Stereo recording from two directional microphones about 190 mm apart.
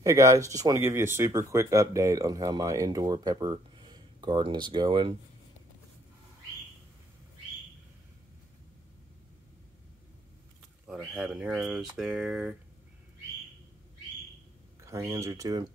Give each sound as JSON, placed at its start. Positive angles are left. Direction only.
{"t": 0.0, "sound": "speech", "side_deg": -15}
{"t": 10.9, "sound": "speech", "side_deg": 0}
{"t": 14.9, "sound": "speech", "side_deg": -15}